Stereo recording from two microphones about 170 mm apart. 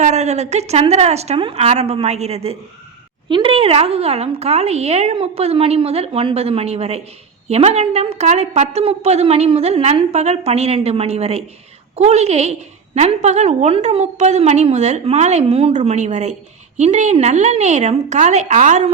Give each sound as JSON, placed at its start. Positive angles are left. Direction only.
{"t": 0.0, "sound": "a woman's voice", "side_deg": -40}